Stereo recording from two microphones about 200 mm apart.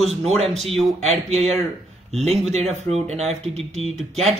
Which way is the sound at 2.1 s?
30° right (ahead or behind).